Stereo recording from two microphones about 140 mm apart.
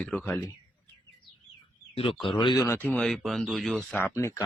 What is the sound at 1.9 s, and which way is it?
Speech, 40° left (ahead or behind).